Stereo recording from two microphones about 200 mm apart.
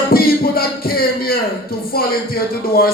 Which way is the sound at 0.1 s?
50° left (ahead or behind).